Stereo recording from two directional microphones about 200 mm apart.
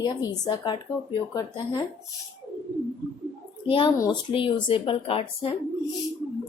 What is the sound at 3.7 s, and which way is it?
A woman's voice, 25° left (ahead or behind).